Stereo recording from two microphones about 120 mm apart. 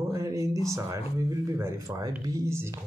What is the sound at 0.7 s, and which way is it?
Speech, 25° right (ahead or behind).